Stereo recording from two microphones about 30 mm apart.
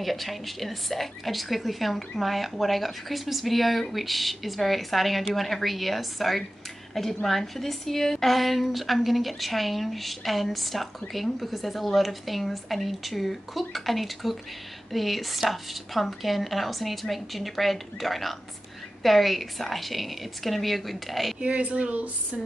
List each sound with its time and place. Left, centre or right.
0.0 s a woman's voice: centre
8.3 s a woman's voice: centre
21.4 s a child's voice: right